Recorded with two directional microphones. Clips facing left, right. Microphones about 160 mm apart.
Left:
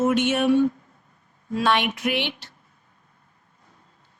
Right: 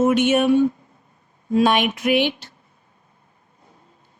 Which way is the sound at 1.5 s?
15° right (ahead or behind).